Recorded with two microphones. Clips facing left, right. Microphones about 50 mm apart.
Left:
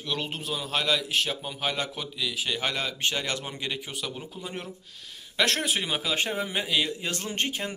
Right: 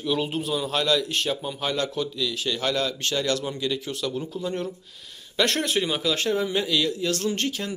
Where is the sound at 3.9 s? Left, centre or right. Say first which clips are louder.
Right 7 dB; centre.